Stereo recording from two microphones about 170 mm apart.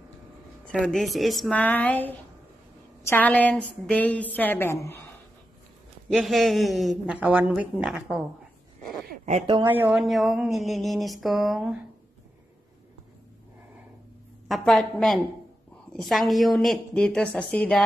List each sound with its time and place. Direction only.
0.7 s a woman's voice: 5° left (ahead or behind)
6.1 s a woman's voice: centre (ahead or behind)
9.1 s a sound: 45° right (ahead or behind)
9.7 s speech: 10° right (ahead or behind)
9.9 s a woman's voice: centre (ahead or behind)
14.5 s a woman's voice: centre (ahead or behind)